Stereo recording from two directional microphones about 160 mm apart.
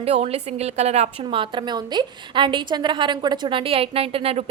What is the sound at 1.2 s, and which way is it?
A woman's voice, 30° right (ahead or behind).